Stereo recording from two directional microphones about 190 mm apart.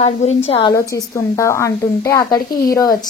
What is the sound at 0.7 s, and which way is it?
A woman's voice, 15° left (ahead or behind).